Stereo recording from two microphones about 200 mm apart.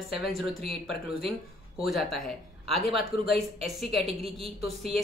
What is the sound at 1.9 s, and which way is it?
Speech, centre (ahead or behind).